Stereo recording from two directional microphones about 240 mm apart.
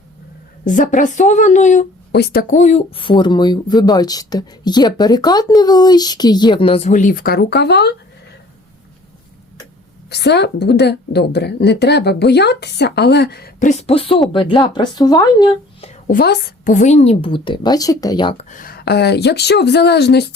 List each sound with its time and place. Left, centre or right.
0.6 s a woman's voice: left
10.1 s a woman's voice: left; by 15.9 s centre
16.1 s a woman's voice: left